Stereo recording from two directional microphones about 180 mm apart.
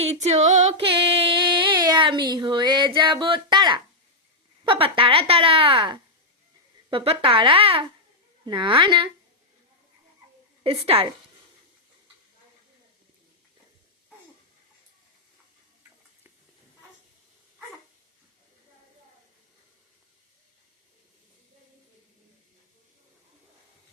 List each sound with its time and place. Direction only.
0.0 s female singing: 40° right (ahead or behind)
4.6 s a woman's voice: 30° right (ahead or behind)
10.6 s speech: 30° right (ahead or behind)